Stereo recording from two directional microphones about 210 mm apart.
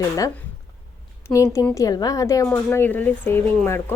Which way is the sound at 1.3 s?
15° left (ahead or behind).